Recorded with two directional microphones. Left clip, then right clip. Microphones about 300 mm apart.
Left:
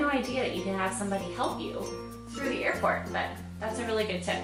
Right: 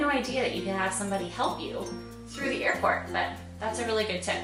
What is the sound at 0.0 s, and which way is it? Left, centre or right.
A woman's voice, centre.